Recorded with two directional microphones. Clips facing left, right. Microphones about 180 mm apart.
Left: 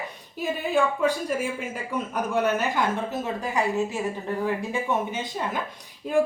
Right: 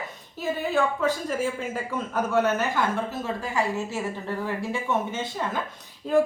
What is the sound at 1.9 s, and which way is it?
A woman's voice, 15° left (ahead or behind).